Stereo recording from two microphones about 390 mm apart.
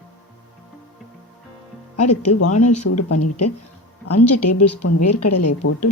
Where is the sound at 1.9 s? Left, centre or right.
Left.